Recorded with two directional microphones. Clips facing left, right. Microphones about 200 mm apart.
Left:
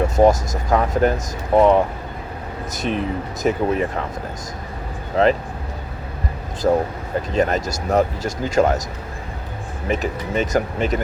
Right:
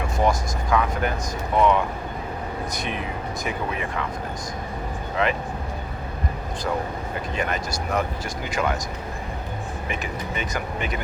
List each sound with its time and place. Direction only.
0.2 s speech: 45° left (ahead or behind)
6.6 s speech: 40° left (ahead or behind)
9.9 s speech: 40° left (ahead or behind)